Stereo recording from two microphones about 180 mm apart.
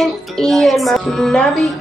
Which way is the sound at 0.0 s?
Centre (ahead or behind).